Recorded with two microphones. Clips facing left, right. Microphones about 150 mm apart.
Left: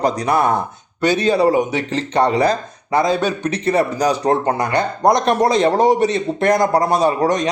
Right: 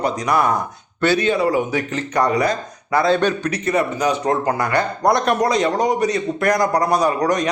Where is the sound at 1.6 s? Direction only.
25° left (ahead or behind).